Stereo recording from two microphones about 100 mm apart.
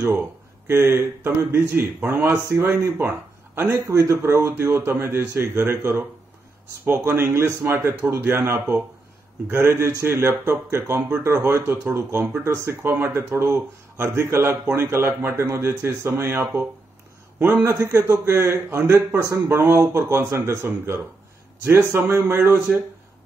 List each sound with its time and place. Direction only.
0.0 s speech: 25° right (ahead or behind)
17.4 s speech: 20° right (ahead or behind)